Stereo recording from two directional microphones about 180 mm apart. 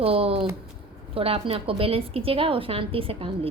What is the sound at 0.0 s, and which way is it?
A woman's voice, 30° right (ahead or behind).